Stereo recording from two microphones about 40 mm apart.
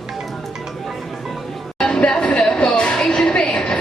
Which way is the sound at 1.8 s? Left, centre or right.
Centre.